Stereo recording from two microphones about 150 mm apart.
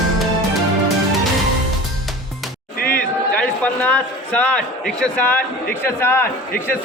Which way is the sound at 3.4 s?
10° left (ahead or behind).